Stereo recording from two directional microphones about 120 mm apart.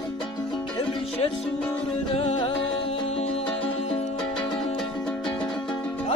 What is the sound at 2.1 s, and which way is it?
Music, 55° left (ahead or behind).